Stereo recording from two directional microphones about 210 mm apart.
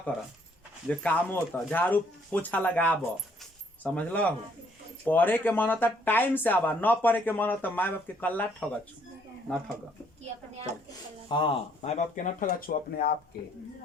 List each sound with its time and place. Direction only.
0.9 s speech: 10° left (ahead or behind)
9.5 s speech: 5° left (ahead or behind)
11.3 s speech: 25° left (ahead or behind); by 13.1 s 40° left (ahead or behind)